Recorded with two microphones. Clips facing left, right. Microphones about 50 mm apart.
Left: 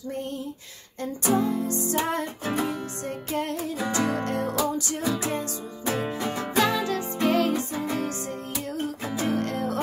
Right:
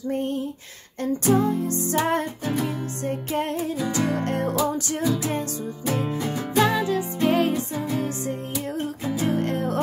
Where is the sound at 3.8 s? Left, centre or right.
Left.